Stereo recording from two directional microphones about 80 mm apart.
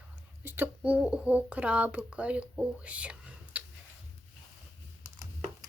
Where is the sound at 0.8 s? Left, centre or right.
Centre.